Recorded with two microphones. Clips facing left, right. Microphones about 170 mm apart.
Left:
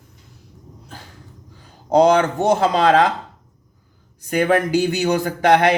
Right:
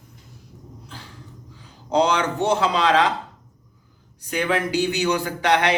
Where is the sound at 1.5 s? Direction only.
50° left (ahead or behind).